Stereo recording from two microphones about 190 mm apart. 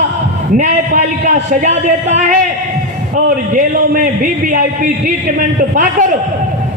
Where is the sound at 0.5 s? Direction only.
40° right (ahead or behind).